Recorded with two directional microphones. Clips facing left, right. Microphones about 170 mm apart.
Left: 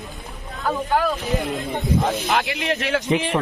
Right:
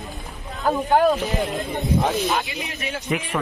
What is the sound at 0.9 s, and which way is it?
Speech, 45° right (ahead or behind).